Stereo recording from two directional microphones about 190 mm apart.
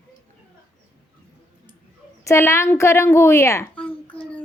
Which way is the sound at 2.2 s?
15° left (ahead or behind).